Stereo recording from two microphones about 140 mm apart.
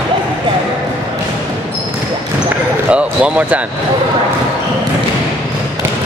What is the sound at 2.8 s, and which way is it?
Speech, 10° right (ahead or behind).